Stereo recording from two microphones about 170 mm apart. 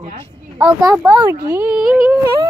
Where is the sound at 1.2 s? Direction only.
15° right (ahead or behind).